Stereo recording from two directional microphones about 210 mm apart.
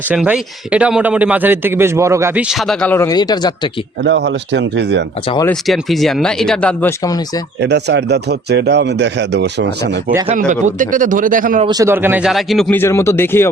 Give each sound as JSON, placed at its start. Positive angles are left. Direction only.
{"t": 0.1, "sound": "a man's voice", "side_deg": -5}
{"t": 4.0, "sound": "speech", "side_deg": -55}
{"t": 5.2, "sound": "speech", "side_deg": 25}
{"t": 5.5, "sound": "a man's voice", "side_deg": 0}
{"t": 7.6, "sound": "speech", "side_deg": -55}
{"t": 10.2, "sound": "speech", "side_deg": -35}
{"t": 11.6, "sound": "a man's voice", "side_deg": -15}